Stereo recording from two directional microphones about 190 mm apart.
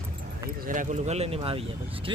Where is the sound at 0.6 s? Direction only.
45° right (ahead or behind).